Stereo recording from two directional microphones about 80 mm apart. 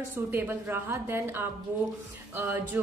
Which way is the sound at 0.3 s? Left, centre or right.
Right.